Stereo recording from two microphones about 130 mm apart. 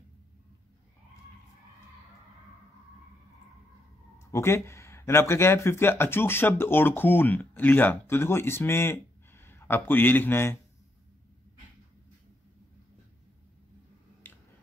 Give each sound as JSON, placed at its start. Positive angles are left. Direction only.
{"t": 4.3, "sound": "speech", "side_deg": 20}